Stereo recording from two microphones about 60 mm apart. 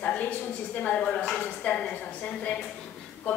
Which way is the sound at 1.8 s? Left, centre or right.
Left.